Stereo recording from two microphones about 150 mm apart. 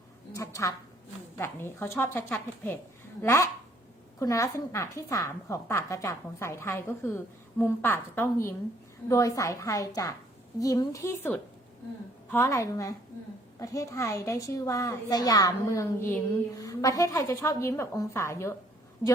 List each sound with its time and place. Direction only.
0.3 s a woman's voice: 20° left (ahead or behind)